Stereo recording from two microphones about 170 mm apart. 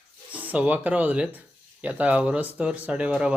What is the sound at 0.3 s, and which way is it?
Speech, 10° right (ahead or behind).